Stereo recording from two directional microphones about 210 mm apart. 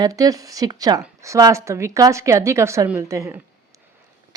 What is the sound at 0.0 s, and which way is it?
Speech, 15° right (ahead or behind).